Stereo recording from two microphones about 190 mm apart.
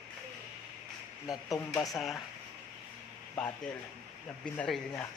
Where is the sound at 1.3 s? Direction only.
20° left (ahead or behind).